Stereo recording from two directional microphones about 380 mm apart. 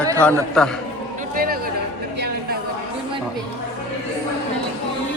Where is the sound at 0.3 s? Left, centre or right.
Centre.